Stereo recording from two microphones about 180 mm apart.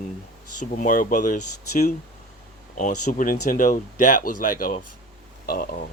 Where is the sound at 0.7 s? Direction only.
50° left (ahead or behind).